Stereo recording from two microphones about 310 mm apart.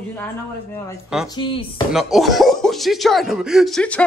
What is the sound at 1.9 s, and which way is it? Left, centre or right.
Speech, centre.